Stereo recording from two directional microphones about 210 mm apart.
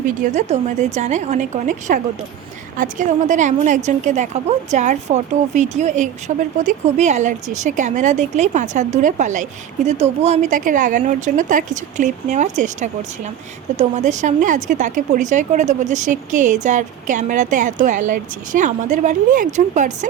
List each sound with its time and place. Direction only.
0.0 s speech: 35° right (ahead or behind)